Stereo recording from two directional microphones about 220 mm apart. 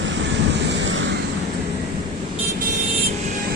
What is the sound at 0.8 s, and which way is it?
Vehicle, 55° right (ahead or behind).